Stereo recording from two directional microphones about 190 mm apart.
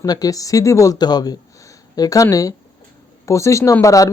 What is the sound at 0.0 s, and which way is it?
Speech, 20° left (ahead or behind).